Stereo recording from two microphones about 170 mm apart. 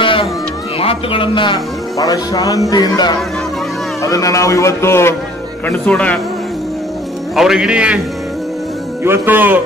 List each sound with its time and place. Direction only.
0.0 s music: 30° left (ahead or behind)
0.7 s speech: 35° left (ahead or behind); by 6.1 s 10° left (ahead or behind)
7.3 s a man's voice: 5° right (ahead or behind)
9.0 s a man's voice: 15° right (ahead or behind)